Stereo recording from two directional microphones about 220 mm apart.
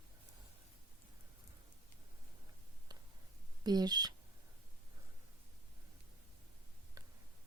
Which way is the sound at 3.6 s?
20° right (ahead or behind).